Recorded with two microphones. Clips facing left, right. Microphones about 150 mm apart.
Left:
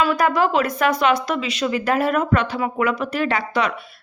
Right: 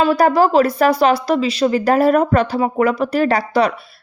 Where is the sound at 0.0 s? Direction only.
35° right (ahead or behind).